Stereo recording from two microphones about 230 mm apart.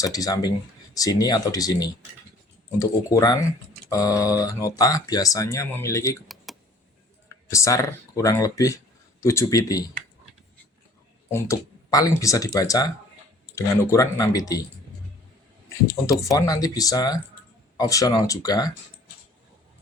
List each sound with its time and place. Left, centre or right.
0.0 s speech: centre
6.2 s computer keyboard: centre
7.3 s speech: centre
11.3 s speech: centre
16.2 s speech: centre